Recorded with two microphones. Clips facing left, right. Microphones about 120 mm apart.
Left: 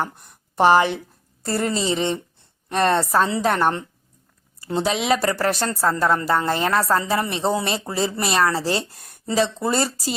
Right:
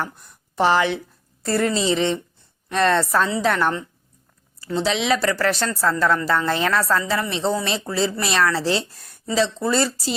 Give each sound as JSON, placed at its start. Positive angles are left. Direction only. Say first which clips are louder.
{"t": 0.0, "sound": "a woman's voice", "louder": "left 2 dB", "side_deg": 50}